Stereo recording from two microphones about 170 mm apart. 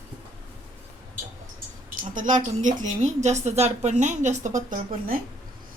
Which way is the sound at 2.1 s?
50° right (ahead or behind).